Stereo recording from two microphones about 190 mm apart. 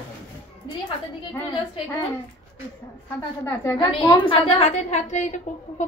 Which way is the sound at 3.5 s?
15° left (ahead or behind).